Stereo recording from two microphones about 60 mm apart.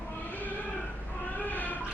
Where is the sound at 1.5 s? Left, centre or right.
Left.